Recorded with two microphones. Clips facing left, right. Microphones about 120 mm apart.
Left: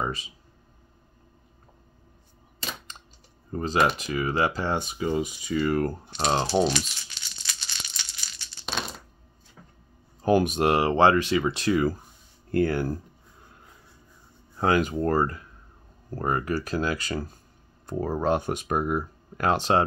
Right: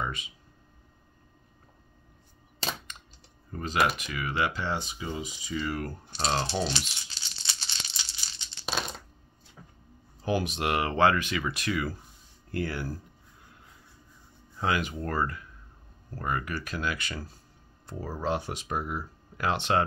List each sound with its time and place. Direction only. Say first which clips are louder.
0.0 s speech: left 4 dB; 35° left (ahead or behind)
3.5 s speech: left 4 dB; 30° left (ahead or behind); by 6.1 s 45° left (ahead or behind)
6.1 s speech: left 3 dB; 25° left (ahead or behind)
6.4 s speech: left 7 dB; 40° left (ahead or behind)
7.1 s crumpling: even; 30° right (ahead or behind)
8.7 s a sound: left 1 dB; centre (ahead or behind)
10.2 s speech: left 8 dB; 50° left (ahead or behind)
10.7 s speech: left 4 dB; 30° left (ahead or behind)
12.4 s speech: left 9 dB; 50° left (ahead or behind)
14.6 s speech: left 7 dB; 45° left (ahead or behind)